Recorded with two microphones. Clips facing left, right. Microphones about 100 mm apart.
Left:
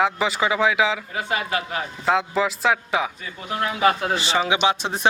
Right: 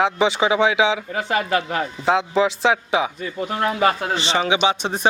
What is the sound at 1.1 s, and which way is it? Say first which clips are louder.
Speech: right 4 dB; 35° right (ahead or behind).